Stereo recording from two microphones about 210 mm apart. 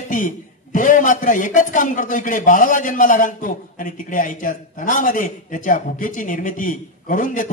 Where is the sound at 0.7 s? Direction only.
40° left (ahead or behind).